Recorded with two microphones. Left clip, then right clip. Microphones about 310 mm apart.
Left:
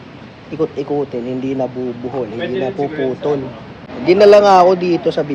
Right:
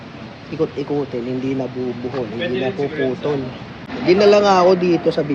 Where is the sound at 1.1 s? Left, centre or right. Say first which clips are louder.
Left 2 dB; centre.